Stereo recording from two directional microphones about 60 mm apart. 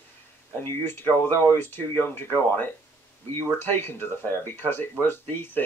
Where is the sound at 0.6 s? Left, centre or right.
Left.